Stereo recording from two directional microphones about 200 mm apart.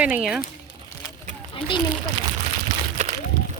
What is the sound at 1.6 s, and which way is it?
Speech, 25° left (ahead or behind).